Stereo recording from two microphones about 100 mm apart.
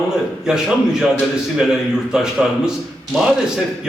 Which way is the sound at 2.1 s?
5° right (ahead or behind).